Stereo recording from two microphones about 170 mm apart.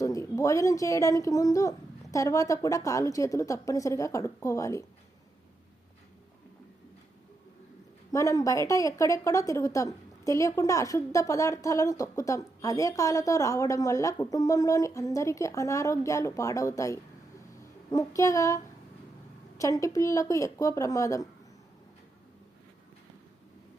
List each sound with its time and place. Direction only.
0.0 s a woman's voice: 20° left (ahead or behind)
8.1 s a woman's voice: 20° left (ahead or behind)